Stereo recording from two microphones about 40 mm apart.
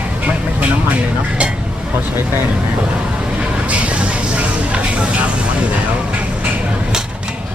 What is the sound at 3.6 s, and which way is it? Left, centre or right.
Vehicle, right.